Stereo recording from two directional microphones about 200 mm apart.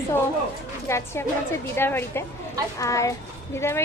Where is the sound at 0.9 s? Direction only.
15° left (ahead or behind).